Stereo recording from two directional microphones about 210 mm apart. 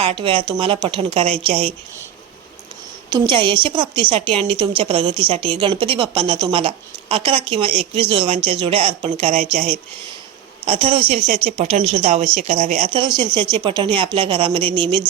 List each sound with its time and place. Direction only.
0.0 s a woman's voice: 25° right (ahead or behind)
3.1 s a woman's voice: 20° right (ahead or behind)